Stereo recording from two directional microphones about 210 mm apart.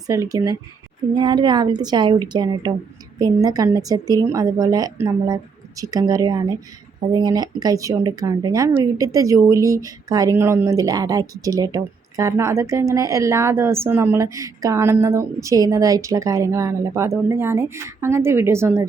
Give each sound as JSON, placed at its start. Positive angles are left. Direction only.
{"t": 0.1, "sound": "a woman's voice", "side_deg": -15}